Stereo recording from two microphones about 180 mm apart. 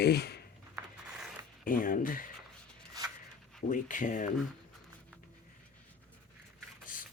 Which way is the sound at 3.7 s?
45° left (ahead or behind).